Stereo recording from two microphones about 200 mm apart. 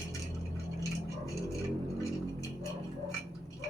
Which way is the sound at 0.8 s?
15° left (ahead or behind).